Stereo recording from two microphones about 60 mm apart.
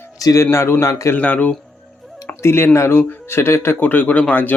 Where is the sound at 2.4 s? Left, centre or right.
Left.